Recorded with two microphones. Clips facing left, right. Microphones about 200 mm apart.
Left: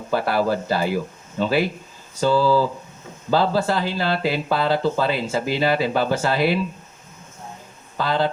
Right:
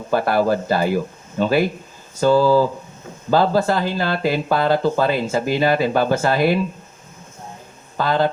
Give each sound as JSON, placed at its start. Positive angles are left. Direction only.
{"t": 0.1, "sound": "speech", "side_deg": -50}
{"t": 7.9, "sound": "speech", "side_deg": -50}